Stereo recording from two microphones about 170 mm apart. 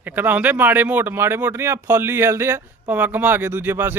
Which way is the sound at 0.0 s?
10° right (ahead or behind).